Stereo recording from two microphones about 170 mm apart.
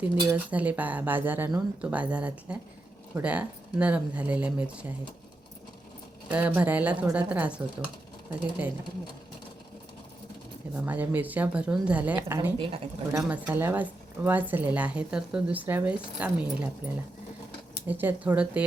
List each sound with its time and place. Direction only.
0.0 s speech: 10° right (ahead or behind)
6.2 s speech: 10° right (ahead or behind)
10.8 s speech: 10° right (ahead or behind)
12.5 s a woman's voice: 30° right (ahead or behind)
13.1 s speech: 10° right (ahead or behind)